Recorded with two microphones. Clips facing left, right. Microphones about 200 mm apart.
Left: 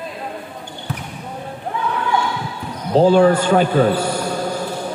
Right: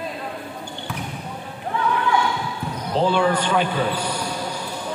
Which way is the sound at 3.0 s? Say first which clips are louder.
Left 8 dB; 40° left (ahead or behind).